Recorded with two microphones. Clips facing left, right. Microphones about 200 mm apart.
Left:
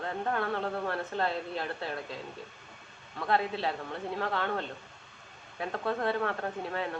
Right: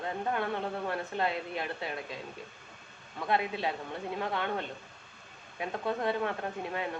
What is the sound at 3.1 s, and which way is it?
Speech, 15° right (ahead or behind).